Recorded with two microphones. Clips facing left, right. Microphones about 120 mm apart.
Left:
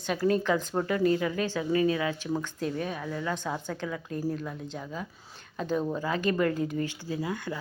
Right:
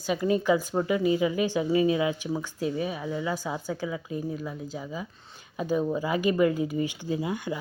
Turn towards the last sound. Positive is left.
turn(degrees=-15)  # may be behind; listen again after turning